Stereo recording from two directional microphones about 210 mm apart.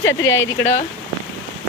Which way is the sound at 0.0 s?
65° left (ahead or behind).